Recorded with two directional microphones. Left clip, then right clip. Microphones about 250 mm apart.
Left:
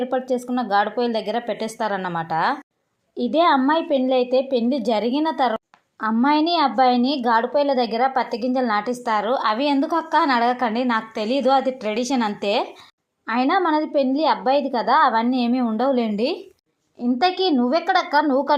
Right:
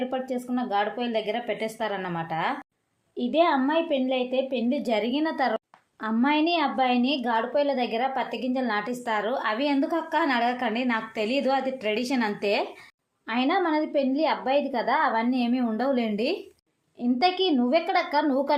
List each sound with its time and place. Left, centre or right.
0.1 s a woman's voice: left
6.9 s a woman's voice: centre
7.2 s a woman's voice: centre